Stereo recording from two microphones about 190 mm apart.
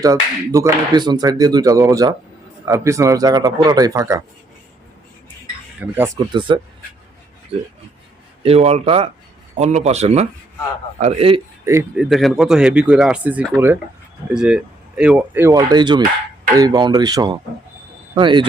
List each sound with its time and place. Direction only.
0.0 s speech: 15° right (ahead or behind)
5.8 s speech: 10° right (ahead or behind)
6.5 s speech: 25° right (ahead or behind)
8.4 s speech: 35° right (ahead or behind)
11.6 s speech: 15° right (ahead or behind)
11.9 s speech: centre (ahead or behind); by 18.4 s 25° right (ahead or behind)